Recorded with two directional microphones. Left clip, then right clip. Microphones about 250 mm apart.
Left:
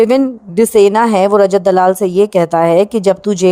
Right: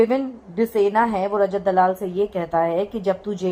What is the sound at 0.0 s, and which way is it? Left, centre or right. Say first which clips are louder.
A woman's voice: left 9 dB; left.